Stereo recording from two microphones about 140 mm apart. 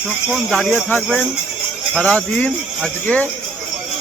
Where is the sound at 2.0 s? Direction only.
10° left (ahead or behind).